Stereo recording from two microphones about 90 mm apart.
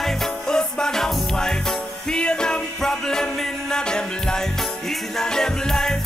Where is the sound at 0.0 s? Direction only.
5° left (ahead or behind).